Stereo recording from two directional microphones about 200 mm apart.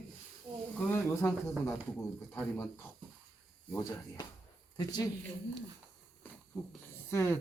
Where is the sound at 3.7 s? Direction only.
15° left (ahead or behind).